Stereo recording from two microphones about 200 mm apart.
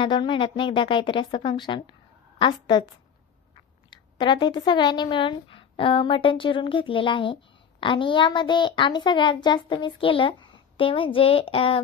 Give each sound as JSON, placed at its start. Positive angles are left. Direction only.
{"t": 0.0, "sound": "speech", "side_deg": 25}
{"t": 3.9, "sound": "speech", "side_deg": 25}